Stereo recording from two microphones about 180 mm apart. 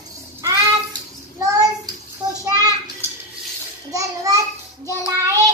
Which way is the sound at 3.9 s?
20° right (ahead or behind).